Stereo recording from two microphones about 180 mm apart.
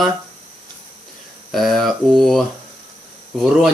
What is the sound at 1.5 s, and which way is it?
Speech, centre (ahead or behind).